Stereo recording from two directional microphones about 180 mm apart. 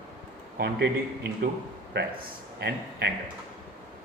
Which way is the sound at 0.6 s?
65° right (ahead or behind).